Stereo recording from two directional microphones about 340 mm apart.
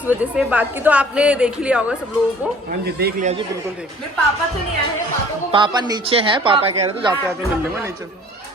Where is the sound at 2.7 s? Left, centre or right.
Right.